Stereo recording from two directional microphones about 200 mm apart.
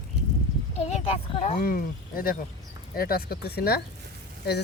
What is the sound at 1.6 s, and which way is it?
Speech, 45° left (ahead or behind).